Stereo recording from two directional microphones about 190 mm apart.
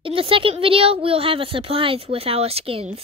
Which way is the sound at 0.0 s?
30° right (ahead or behind).